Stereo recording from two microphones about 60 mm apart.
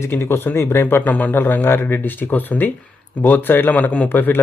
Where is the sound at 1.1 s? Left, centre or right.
Left.